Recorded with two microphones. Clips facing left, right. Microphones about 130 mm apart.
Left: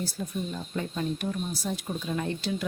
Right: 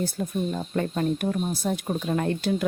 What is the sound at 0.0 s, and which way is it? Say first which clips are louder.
Speech: right 6 dB; 55° right (ahead or behind).